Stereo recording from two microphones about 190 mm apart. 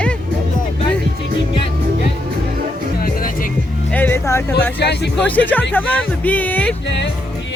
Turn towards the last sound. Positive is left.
turn(degrees=10)  # may be behind; listen again after turning